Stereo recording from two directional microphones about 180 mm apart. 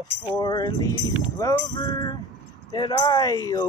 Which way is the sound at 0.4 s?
20° left (ahead or behind).